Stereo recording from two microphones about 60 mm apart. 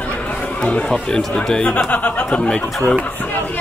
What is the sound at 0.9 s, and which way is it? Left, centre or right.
Speech, centre.